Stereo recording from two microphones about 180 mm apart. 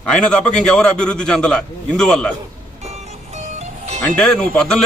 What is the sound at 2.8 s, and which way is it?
Music, 35° right (ahead or behind).